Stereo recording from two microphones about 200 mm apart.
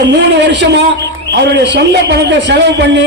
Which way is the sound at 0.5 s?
60° right (ahead or behind).